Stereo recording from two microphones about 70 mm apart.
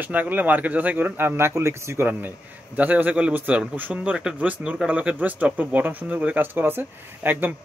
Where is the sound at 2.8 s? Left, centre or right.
Right.